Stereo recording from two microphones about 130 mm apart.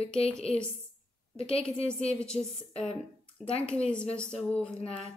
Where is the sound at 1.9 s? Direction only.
5° left (ahead or behind).